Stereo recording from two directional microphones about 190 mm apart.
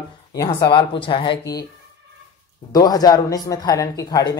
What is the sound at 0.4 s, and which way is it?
Speech, 20° left (ahead or behind).